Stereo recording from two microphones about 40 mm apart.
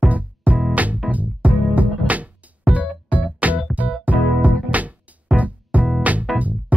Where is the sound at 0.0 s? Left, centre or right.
Right.